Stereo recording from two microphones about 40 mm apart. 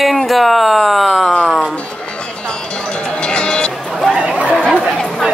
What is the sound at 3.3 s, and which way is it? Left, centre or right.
Music, left.